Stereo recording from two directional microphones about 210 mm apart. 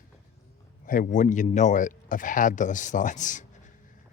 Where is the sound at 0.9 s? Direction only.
40° left (ahead or behind).